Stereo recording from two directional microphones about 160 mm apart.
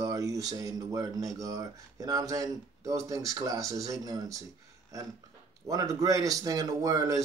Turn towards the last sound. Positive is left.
turn(degrees=-20)  # may be behind; listen again after turning